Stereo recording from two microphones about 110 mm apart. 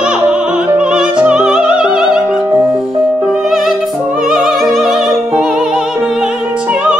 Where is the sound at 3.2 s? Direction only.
5° right (ahead or behind).